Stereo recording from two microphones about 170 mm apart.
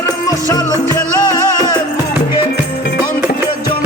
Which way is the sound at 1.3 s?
25° left (ahead or behind).